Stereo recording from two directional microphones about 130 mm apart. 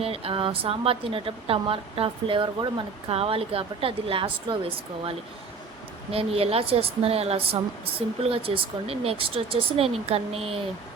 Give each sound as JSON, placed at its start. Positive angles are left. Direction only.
{"t": 0.0, "sound": "a woman's voice", "side_deg": -45}